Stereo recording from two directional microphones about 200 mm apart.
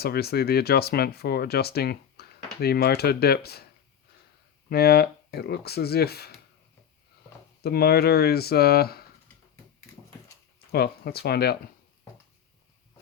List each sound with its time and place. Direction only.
0.0 s speech: 50° left (ahead or behind)
4.7 s speech: 50° left (ahead or behind)
7.6 s speech: 50° left (ahead or behind)
10.7 s speech: 50° left (ahead or behind)